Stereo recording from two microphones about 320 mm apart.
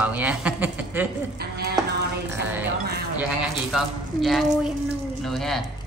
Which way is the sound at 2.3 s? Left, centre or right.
Centre.